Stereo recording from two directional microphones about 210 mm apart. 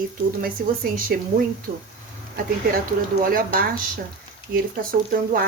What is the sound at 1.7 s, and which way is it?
Speech, 45° right (ahead or behind).